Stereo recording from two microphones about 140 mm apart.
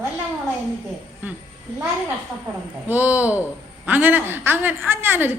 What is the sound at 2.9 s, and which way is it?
A woman's voice, 10° right (ahead or behind).